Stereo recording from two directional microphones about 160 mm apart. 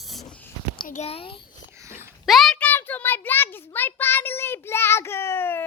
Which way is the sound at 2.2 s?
Centre (ahead or behind).